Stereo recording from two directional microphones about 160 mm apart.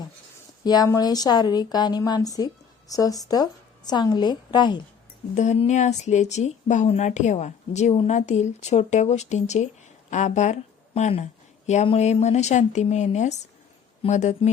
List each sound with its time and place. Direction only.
0.6 s a woman's voice: 25° left (ahead or behind)
5.3 s a woman's voice: 45° left (ahead or behind)